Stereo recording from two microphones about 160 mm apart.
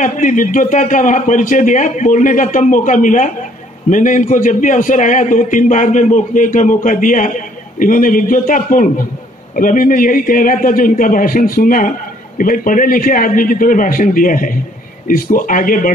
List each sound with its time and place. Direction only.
0.0 s a man's voice: 55° left (ahead or behind)